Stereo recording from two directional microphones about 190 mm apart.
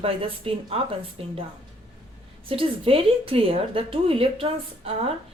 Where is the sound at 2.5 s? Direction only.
30° right (ahead or behind).